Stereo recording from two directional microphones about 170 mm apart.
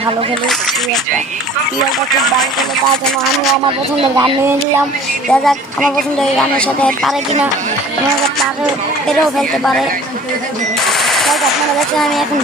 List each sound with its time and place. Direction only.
3.2 s a woman's voice: centre (ahead or behind)
3.9 s speech: 30° right (ahead or behind)
5.3 s a woman's voice: 5° left (ahead or behind)
9.4 s a woman's voice: centre (ahead or behind)
10.8 s machine gun: centre (ahead or behind)
11.8 s a woman's voice: centre (ahead or behind)